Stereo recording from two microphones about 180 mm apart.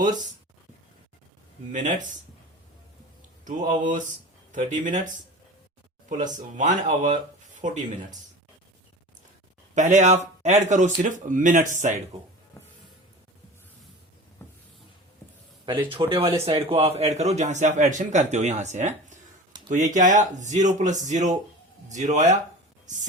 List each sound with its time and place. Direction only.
1.7 s speech: 45° right (ahead or behind)
3.4 s speech: 45° right (ahead or behind)
6.3 s speech: 45° right (ahead or behind)
9.7 s speech: 40° right (ahead or behind)
15.6 s a man's voice: 25° right (ahead or behind)